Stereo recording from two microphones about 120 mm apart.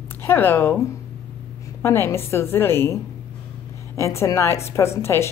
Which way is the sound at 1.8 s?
20° left (ahead or behind).